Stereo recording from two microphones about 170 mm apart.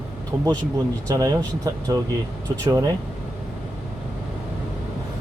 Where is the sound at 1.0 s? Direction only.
20° right (ahead or behind).